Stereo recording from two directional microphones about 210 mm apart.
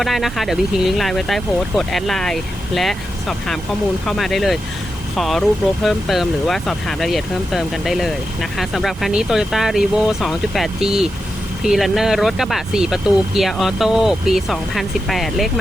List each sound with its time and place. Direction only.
0.0 s speech: centre (ahead or behind)